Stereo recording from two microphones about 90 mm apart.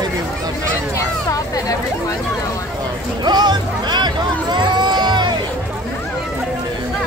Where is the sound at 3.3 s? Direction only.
50° right (ahead or behind).